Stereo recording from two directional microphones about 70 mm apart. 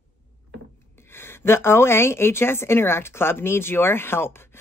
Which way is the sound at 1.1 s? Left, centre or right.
Left.